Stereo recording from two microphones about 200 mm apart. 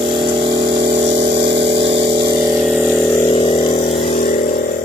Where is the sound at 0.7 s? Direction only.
55° right (ahead or behind).